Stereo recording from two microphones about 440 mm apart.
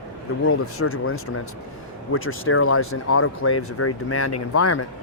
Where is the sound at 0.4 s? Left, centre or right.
Left.